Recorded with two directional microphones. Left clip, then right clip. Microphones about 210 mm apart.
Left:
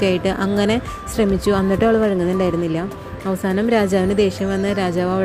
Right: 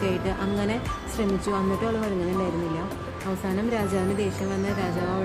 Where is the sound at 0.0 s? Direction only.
35° left (ahead or behind).